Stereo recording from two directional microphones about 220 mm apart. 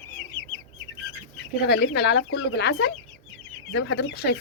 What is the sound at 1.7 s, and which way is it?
Speech, 50° left (ahead or behind).